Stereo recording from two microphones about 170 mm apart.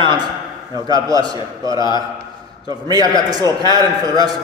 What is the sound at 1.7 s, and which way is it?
Speech, 25° left (ahead or behind).